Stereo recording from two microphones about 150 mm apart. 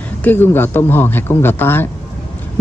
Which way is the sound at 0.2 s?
15° left (ahead or behind).